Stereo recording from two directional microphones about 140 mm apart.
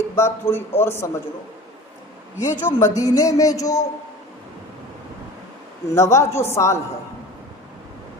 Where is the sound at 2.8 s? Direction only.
25° left (ahead or behind).